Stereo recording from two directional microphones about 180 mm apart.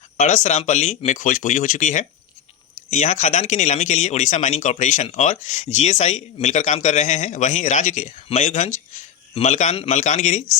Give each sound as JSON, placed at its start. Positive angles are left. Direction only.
{"t": 0.2, "sound": "speech", "side_deg": 40}